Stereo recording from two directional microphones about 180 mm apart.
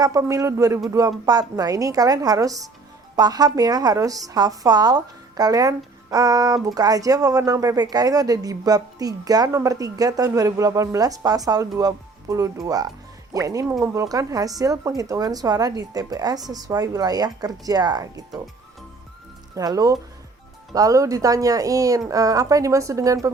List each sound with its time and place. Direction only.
0.0 s a woman's voice: 20° right (ahead or behind)
19.5 s a woman's voice: 20° right (ahead or behind)